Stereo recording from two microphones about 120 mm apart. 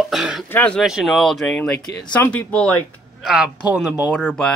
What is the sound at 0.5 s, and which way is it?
Speech, 15° left (ahead or behind).